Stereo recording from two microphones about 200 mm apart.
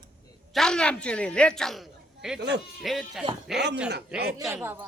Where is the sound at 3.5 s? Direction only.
55° right (ahead or behind).